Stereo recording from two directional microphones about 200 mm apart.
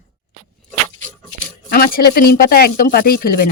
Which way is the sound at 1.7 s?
45° left (ahead or behind).